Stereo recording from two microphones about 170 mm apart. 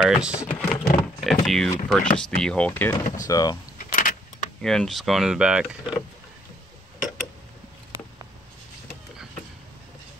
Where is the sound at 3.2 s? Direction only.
20° left (ahead or behind).